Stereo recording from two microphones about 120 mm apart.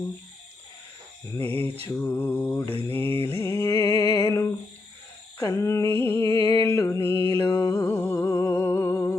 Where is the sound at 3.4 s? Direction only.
25° left (ahead or behind).